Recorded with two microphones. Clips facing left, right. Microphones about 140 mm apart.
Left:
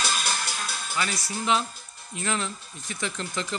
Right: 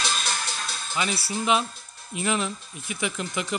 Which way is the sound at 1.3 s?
15° right (ahead or behind).